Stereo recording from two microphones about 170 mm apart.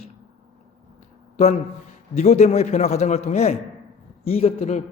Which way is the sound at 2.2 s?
40° left (ahead or behind).